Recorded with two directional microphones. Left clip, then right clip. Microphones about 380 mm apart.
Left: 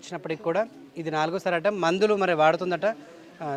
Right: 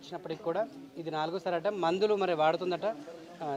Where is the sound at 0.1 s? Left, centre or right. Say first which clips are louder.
Left 7 dB; left.